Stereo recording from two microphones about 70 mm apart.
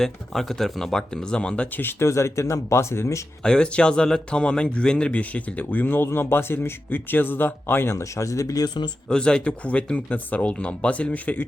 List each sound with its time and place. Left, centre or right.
0.0 s speech: centre; by 2.0 s left
2.0 s speech: left
3.4 s a man's voice: centre; by 8.9 s left
9.0 s speech: centre